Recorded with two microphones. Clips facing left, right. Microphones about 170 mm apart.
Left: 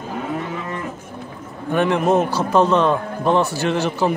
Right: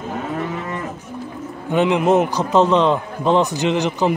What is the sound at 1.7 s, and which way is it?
A man's voice, 15° right (ahead or behind).